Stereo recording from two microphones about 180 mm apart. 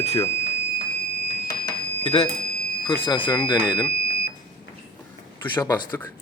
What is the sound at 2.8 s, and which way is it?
A man's voice, 30° left (ahead or behind).